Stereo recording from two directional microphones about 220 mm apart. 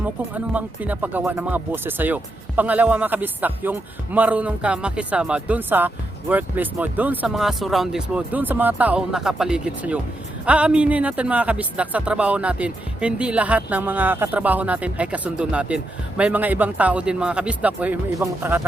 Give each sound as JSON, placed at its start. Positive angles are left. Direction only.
{"t": 0.0, "sound": "speech", "side_deg": -5}